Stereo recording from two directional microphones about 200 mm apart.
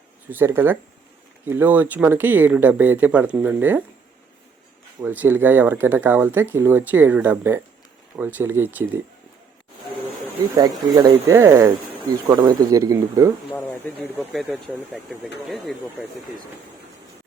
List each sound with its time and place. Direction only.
0.3 s speech: 10° right (ahead or behind)
4.9 s speech: 10° right (ahead or behind)
10.5 s speech: 20° right (ahead or behind)
13.5 s speech: 10° left (ahead or behind)
14.2 s speech: 5° right (ahead or behind)